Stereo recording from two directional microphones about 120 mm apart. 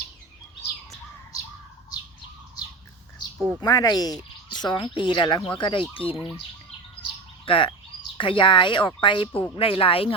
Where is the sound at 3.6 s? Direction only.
30° left (ahead or behind); by 6.3 s 50° left (ahead or behind).